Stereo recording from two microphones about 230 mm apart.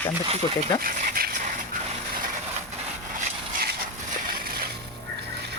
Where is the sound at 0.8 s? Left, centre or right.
Right.